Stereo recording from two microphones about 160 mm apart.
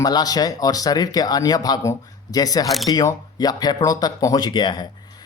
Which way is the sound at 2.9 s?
20° left (ahead or behind).